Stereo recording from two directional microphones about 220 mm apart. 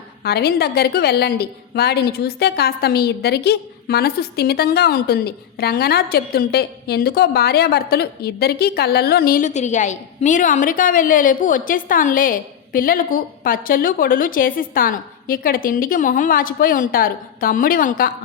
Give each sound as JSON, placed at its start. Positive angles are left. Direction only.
{"t": 0.2, "sound": "a woman's voice", "side_deg": 45}